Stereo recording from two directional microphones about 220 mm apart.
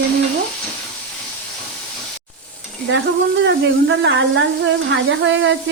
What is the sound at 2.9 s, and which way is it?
A woman's voice, 55° right (ahead or behind).